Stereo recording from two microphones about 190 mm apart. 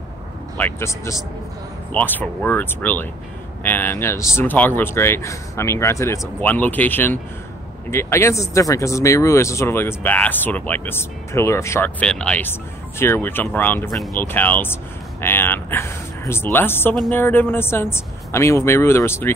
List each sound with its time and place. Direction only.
0.6 s speech: 10° left (ahead or behind)